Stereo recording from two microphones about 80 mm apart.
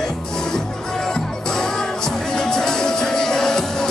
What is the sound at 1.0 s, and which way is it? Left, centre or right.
Music, centre.